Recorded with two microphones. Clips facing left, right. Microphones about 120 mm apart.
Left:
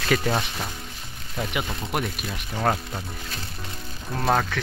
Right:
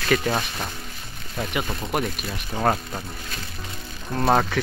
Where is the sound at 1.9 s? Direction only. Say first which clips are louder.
Right 2 dB; centre (ahead or behind).